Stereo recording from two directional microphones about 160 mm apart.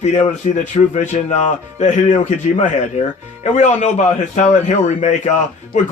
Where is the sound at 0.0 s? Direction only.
45° left (ahead or behind).